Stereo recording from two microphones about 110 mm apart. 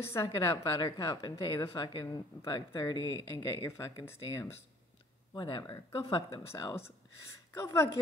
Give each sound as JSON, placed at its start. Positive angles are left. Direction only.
{"t": 0.0, "sound": "a woman's voice", "side_deg": 25}
{"t": 0.7, "sound": "a woman's voice", "side_deg": 40}
{"t": 5.3, "sound": "speech", "side_deg": 40}
{"t": 6.5, "sound": "a woman's voice", "side_deg": 25}